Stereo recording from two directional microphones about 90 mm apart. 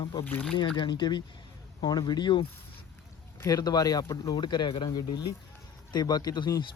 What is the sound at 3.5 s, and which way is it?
Speech, 45° left (ahead or behind).